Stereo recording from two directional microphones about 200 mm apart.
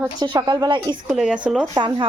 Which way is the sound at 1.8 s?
20° right (ahead or behind).